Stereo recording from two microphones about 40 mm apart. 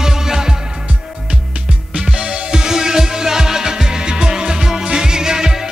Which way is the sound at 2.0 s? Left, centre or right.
Right.